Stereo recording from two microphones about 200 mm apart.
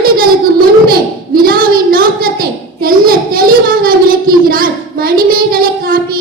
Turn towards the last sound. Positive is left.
turn(degrees=-45)  # may be behind; listen again after turning